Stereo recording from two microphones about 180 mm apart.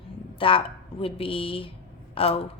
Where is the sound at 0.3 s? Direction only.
30° left (ahead or behind).